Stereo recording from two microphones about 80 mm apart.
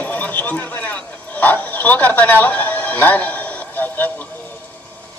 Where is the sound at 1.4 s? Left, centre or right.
Left.